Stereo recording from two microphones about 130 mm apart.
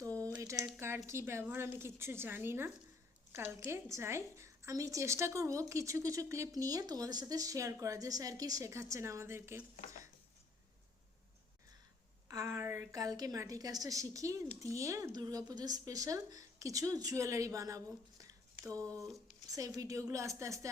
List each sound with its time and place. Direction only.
0.0 s typing: 25° right (ahead or behind)
0.3 s a woman's voice: 20° right (ahead or behind)
12.3 s a woman's voice: 25° right (ahead or behind)